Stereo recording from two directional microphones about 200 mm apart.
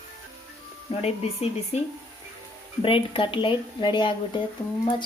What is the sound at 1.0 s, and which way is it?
Speech, 30° left (ahead or behind).